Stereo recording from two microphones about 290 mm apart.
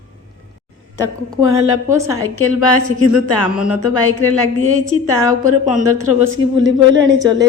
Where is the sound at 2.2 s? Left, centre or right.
Left.